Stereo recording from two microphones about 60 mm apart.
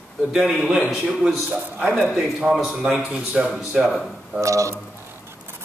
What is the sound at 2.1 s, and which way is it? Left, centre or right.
A man's voice, centre.